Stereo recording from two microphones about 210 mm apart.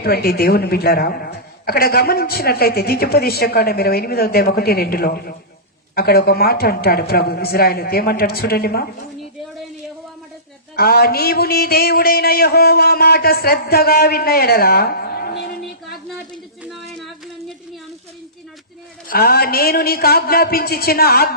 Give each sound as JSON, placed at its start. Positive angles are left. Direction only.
{"t": 0.0, "sound": "a woman's voice", "side_deg": 45}
{"t": 10.8, "sound": "a woman's voice", "side_deg": 45}
{"t": 19.0, "sound": "a woman's voice", "side_deg": 45}